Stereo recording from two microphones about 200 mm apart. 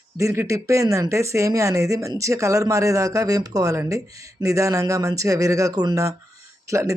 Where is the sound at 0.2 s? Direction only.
15° right (ahead or behind).